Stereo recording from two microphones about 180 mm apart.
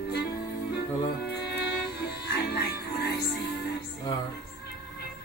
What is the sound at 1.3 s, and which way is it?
Music, 65° left (ahead or behind).